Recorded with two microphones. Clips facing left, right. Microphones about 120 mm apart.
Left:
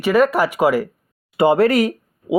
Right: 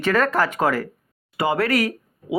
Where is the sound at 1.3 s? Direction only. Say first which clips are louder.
Left 7 dB; 25° left (ahead or behind).